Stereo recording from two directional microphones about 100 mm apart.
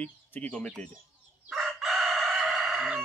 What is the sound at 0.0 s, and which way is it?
Speech, 15° left (ahead or behind).